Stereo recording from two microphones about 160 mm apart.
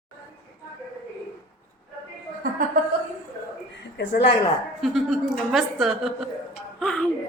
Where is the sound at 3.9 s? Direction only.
90° left.